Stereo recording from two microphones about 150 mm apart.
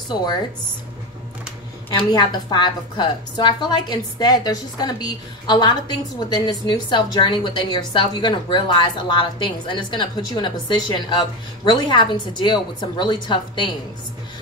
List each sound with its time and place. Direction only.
1.9 s a woman's voice: 30° left (ahead or behind)